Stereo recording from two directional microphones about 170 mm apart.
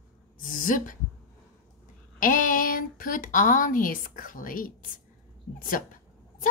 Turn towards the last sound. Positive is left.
turn(degrees=55)  # may be behind; listen again after turning